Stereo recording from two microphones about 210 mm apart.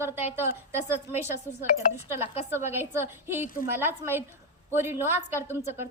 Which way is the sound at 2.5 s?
10° right (ahead or behind).